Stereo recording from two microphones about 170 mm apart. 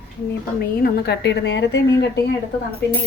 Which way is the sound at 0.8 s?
70° left (ahead or behind).